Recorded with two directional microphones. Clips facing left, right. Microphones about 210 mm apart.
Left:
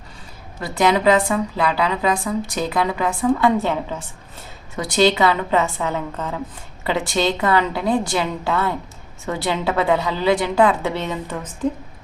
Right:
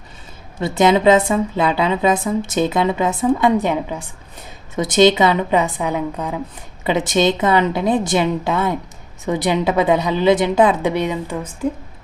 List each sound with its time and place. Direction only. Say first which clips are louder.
0.6 s a woman's voice: right 4 dB; 25° right (ahead or behind)